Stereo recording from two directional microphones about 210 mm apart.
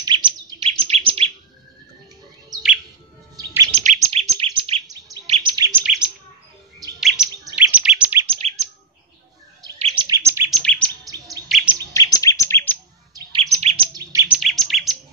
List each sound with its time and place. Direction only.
0.0 s chirp: 20° right (ahead or behind)
3.3 s chirp: 20° right (ahead or behind)
3.7 s chirp: 35° right (ahead or behind); by 5.9 s 10° right (ahead or behind)
7.0 s chirp: centre (ahead or behind)
7.5 s bird: 5° right (ahead or behind)
8.3 s chirp: 30° right (ahead or behind)
9.6 s bird: 20° right (ahead or behind)
10.5 s chirp: 5° left (ahead or behind)
11.9 s chirp: 15° left (ahead or behind)
13.1 s bird: 25° right (ahead or behind)
13.9 s bird: 10° right (ahead or behind)